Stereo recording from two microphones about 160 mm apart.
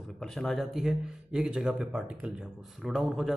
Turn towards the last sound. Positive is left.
turn(degrees=-5)  # may be behind; listen again after turning